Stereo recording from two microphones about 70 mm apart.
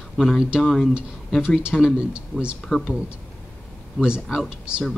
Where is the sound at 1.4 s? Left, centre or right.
Centre.